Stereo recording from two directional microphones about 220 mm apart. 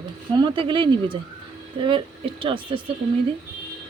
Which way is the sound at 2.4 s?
25° right (ahead or behind).